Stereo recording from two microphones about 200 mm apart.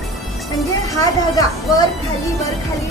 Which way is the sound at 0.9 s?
15° left (ahead or behind).